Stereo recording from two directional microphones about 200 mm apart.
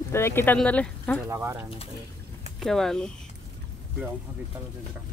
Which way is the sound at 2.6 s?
Centre (ahead or behind).